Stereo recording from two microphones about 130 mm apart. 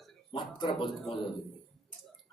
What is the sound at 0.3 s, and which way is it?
Speech, 40° left (ahead or behind).